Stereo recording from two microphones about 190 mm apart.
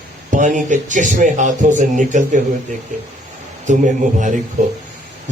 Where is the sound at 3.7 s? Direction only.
40° right (ahead or behind).